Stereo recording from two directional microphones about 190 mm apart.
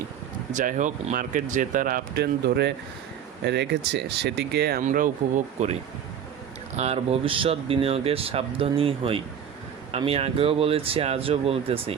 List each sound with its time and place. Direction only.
0.5 s speech: 40° right (ahead or behind); by 4.8 s 60° right (ahead or behind)
4.8 s speech: 45° right (ahead or behind)
6.7 s speech: 35° right (ahead or behind)